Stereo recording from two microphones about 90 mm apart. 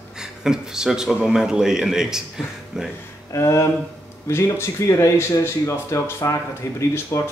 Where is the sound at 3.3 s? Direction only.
35° left (ahead or behind).